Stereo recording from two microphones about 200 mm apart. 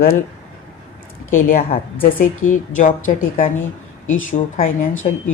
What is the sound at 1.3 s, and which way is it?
A woman's voice, 45° left (ahead or behind).